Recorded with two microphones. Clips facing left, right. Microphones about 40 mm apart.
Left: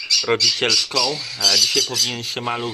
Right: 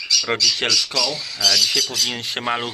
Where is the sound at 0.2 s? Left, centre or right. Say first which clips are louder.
Left 3 dB; centre.